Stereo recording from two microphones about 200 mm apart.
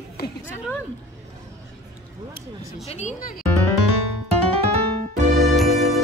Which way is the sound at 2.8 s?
35° left (ahead or behind).